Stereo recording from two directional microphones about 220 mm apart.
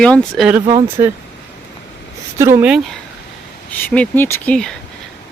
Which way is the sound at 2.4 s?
10° right (ahead or behind).